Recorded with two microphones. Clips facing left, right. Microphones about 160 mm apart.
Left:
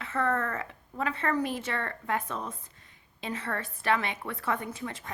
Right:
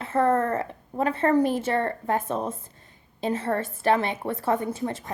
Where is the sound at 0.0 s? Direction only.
30° right (ahead or behind).